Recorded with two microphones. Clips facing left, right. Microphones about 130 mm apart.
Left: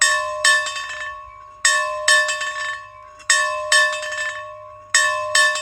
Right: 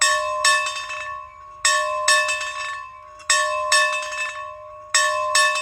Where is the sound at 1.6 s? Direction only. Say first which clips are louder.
Right 1 dB; 10° right (ahead or behind).